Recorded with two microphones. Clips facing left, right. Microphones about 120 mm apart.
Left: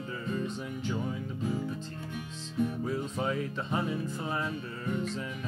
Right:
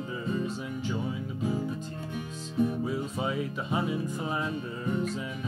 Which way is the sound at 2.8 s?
10° right (ahead or behind).